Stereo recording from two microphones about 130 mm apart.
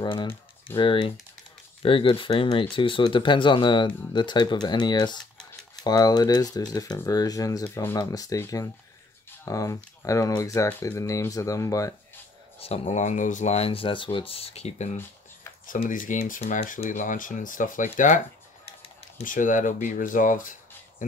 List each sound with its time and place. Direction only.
0.0 s speech: 35° left (ahead or behind)
12.5 s speech: 50° left (ahead or behind)
15.9 s speech: 90° left
17.9 s speech: 75° left (ahead or behind)
19.2 s speech: 85° left